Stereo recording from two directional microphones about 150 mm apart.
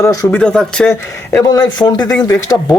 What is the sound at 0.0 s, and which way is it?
Speech, 20° left (ahead or behind).